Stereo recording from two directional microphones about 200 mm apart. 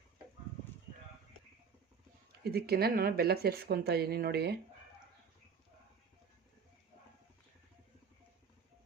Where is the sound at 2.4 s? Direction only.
55° right (ahead or behind).